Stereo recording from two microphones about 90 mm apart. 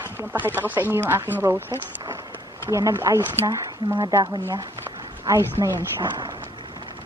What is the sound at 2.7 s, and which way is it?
Speech, 35° right (ahead or behind).